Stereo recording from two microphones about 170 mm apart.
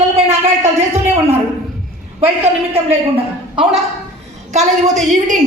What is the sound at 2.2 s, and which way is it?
Speech, 35° right (ahead or behind).